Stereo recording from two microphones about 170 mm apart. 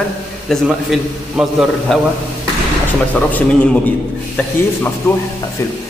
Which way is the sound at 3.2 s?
10° left (ahead or behind).